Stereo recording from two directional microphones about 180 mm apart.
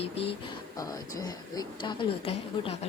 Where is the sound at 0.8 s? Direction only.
20° left (ahead or behind).